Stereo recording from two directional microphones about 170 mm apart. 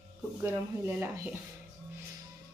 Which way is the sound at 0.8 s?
15° right (ahead or behind).